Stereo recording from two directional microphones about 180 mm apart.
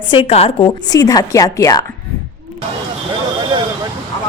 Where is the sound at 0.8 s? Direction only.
20° left (ahead or behind).